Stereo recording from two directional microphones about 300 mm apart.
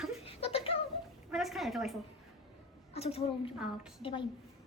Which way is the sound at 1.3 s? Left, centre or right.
Centre.